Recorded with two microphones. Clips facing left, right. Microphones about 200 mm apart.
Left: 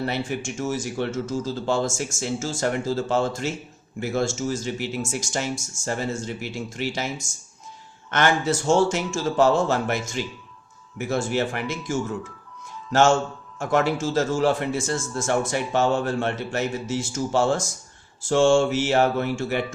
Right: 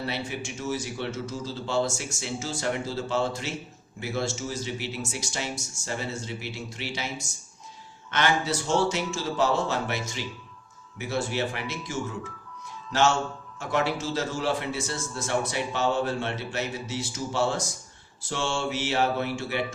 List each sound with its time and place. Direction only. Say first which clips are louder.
0.0 s a man's voice: left 5 dB; 50° left (ahead or behind)
8.1 s a man's voice: left 4 dB; 50° left (ahead or behind)